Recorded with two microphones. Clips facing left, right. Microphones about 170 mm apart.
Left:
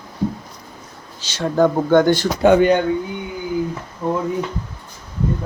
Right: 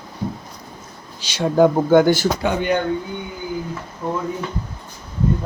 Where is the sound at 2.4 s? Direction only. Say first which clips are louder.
Left 9 dB; 55° left (ahead or behind).